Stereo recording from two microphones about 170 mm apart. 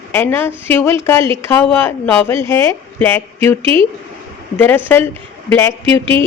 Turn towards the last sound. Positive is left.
turn(degrees=-30)  # may be behind; listen again after turning